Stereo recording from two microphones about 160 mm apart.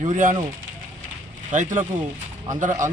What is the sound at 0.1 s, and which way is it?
Speech, 55° right (ahead or behind).